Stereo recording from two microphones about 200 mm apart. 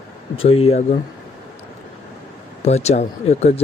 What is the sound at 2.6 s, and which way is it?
Speech, 35° left (ahead or behind).